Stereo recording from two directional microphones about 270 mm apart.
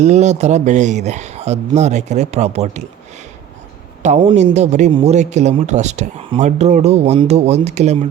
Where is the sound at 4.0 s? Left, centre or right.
Right.